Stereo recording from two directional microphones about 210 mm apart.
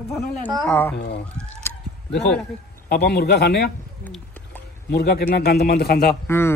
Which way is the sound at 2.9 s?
50° left (ahead or behind).